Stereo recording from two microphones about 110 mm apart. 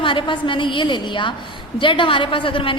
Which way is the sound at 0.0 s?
50° left (ahead or behind).